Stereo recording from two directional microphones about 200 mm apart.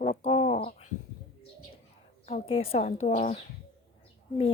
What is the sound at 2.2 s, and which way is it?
Speech, 30° left (ahead or behind).